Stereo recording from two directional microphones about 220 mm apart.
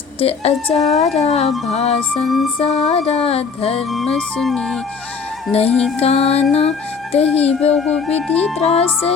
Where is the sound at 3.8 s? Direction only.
Centre (ahead or behind).